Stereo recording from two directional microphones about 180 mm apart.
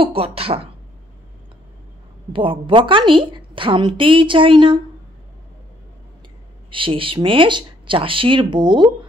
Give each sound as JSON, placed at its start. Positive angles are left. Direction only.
{"t": 0.0, "sound": "speech", "side_deg": -30}
{"t": 2.3, "sound": "a woman's voice", "side_deg": -30}
{"t": 6.7, "sound": "a woman's voice", "side_deg": -30}